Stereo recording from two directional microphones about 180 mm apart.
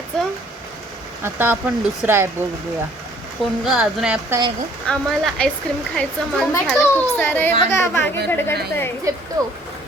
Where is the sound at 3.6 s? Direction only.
5° right (ahead or behind); by 8.5 s 10° left (ahead or behind).